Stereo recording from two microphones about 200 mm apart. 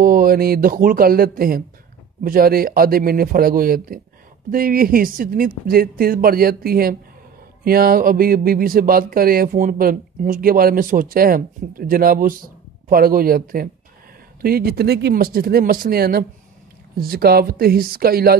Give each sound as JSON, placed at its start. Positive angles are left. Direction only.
{"t": 0.0, "sound": "speech", "side_deg": -45}